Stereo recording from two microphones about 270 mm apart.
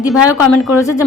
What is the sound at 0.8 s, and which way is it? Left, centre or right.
Speech, centre.